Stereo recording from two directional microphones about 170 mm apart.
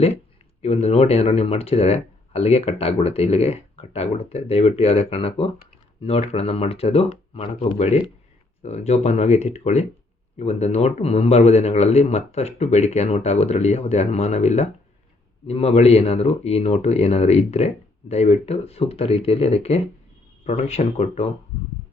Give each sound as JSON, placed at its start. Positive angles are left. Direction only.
{"t": 0.6, "sound": "speech", "side_deg": 35}